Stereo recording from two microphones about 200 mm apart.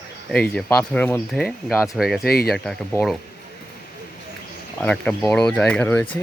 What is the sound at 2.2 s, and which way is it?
Speech, 50° left (ahead or behind).